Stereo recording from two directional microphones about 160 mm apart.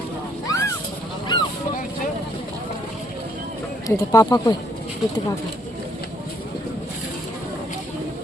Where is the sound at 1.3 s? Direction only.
30° left (ahead or behind).